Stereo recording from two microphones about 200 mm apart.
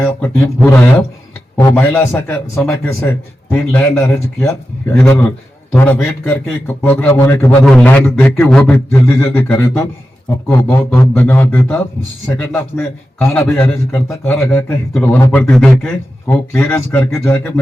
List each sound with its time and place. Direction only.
0.0 s a man's voice: 10° left (ahead or behind)
5.7 s a man's voice: 10° left (ahead or behind)